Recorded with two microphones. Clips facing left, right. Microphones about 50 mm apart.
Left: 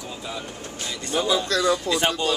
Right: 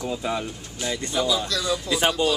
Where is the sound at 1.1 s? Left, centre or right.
Left.